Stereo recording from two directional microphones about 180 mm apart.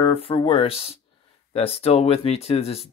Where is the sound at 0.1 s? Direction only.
30° left (ahead or behind).